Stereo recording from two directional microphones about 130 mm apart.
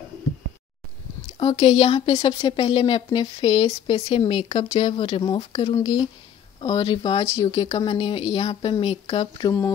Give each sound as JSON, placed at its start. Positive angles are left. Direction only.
{"t": 1.4, "sound": "speech", "side_deg": 45}